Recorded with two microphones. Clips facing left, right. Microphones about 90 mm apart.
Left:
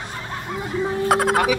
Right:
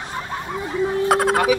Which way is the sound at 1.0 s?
Centre (ahead or behind).